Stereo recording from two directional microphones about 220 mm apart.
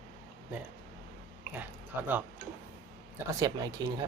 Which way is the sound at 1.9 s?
10° right (ahead or behind).